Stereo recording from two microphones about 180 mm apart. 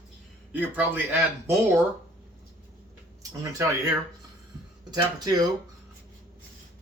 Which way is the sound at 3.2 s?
20° right (ahead or behind).